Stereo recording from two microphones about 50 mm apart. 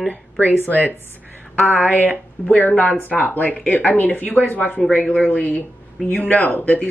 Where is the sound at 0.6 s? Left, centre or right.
Left.